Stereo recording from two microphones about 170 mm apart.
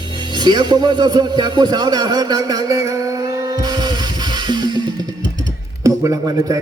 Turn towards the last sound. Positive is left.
turn(degrees=-20)  # may be behind; listen again after turning